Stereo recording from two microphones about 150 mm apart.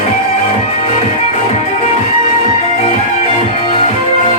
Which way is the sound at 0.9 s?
45° left (ahead or behind).